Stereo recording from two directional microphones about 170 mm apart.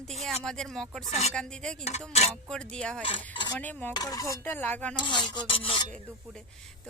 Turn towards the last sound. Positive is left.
turn(degrees=5)  # may be behind; listen again after turning